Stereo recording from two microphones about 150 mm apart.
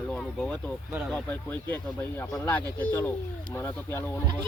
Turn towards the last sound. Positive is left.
turn(degrees=15)  # may be behind; listen again after turning